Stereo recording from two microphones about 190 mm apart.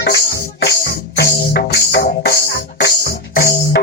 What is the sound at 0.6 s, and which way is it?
Music, 60° left (ahead or behind).